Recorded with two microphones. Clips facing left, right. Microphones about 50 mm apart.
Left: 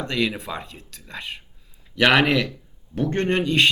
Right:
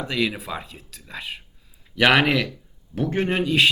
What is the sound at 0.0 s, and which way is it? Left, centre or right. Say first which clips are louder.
A man's voice: even; centre.